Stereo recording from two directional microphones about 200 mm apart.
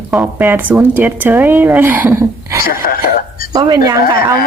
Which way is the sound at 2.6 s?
45° left (ahead or behind).